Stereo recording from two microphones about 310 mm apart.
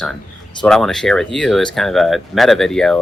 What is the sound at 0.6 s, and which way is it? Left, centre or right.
Speech, centre.